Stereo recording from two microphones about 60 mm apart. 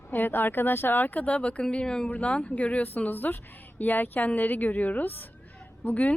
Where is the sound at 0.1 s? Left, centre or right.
Left.